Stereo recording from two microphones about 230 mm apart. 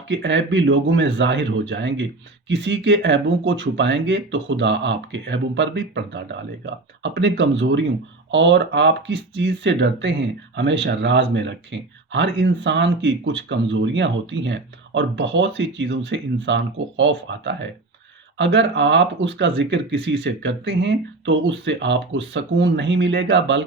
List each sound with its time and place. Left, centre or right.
0.1 s speech: right